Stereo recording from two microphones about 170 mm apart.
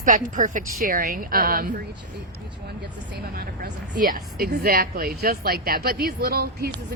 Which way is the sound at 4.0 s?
60° right (ahead or behind).